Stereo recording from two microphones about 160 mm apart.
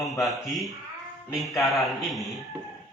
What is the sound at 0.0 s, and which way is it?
Speech, centre (ahead or behind).